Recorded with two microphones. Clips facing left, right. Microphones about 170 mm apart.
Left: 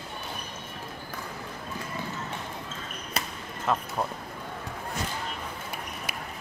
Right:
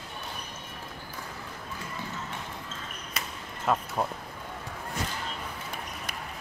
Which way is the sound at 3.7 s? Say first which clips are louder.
Right 1 dB; 5° right (ahead or behind).